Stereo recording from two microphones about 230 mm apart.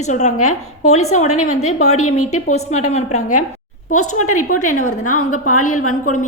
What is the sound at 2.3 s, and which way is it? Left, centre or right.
Speech, left.